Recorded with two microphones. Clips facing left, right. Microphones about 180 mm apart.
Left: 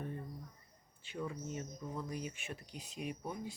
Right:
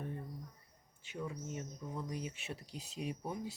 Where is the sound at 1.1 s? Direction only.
10° right (ahead or behind).